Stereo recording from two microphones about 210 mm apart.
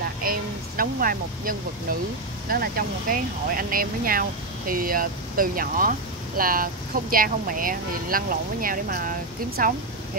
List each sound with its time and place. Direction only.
0.2 s speech: 45° right (ahead or behind)